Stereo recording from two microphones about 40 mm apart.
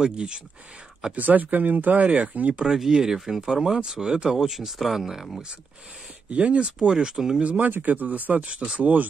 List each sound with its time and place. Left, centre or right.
0.0 s speech: right
1.1 s speech: right
2.6 s speech: centre
6.3 s speech: right
6.8 s speech: right
7.4 s speech: right